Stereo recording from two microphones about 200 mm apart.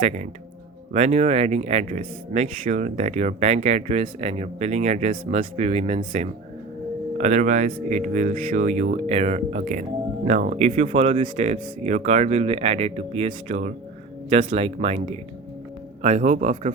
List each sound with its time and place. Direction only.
0.0 s speech: 40° right (ahead or behind)